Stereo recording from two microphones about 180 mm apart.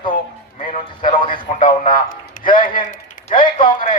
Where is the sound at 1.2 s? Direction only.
50° left (ahead or behind).